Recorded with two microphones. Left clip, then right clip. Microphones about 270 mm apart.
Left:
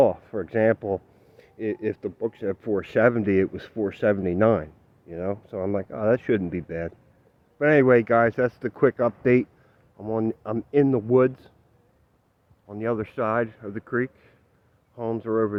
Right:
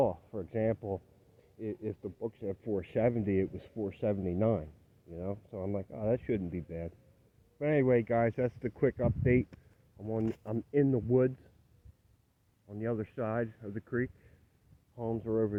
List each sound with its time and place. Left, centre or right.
0.0 s speech: left
10.0 s speech: centre
12.6 s speech: centre